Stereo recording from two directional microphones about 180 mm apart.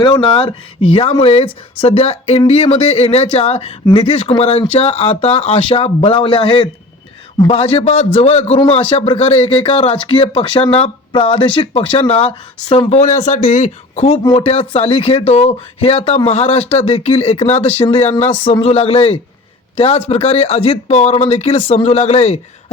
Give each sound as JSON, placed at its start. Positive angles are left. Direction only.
{"t": 0.0, "sound": "a man's voice", "side_deg": 30}